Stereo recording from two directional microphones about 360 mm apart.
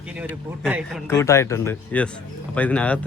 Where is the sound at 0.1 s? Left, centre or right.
Centre.